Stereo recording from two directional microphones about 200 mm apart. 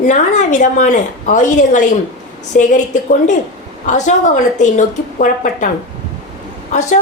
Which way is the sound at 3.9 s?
40° left (ahead or behind).